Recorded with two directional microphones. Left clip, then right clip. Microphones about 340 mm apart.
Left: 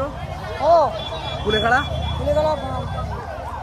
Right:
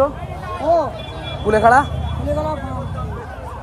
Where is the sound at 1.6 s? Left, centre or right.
Centre.